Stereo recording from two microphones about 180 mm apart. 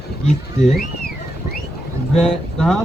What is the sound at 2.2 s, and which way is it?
Speech, 5° left (ahead or behind).